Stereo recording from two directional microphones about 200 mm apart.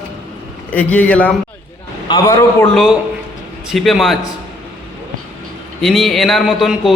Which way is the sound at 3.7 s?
Centre (ahead or behind).